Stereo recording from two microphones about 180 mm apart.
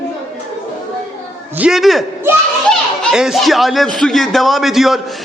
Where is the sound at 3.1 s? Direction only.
Centre (ahead or behind).